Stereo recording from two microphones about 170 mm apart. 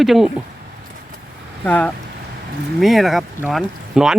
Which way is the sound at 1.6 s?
5° left (ahead or behind).